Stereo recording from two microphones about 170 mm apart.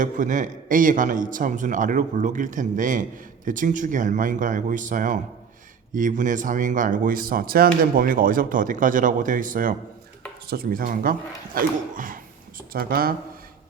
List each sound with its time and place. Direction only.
0.0 s speech: 50° right (ahead or behind)
10.4 s speech: 65° right (ahead or behind)